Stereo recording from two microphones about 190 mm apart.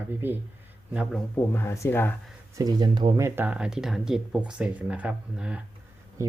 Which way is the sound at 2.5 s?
20° right (ahead or behind).